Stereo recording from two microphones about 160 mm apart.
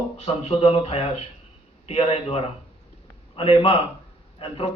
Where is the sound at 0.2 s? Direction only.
40° left (ahead or behind).